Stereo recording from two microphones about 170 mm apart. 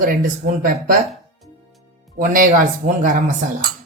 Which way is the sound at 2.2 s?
55° right (ahead or behind).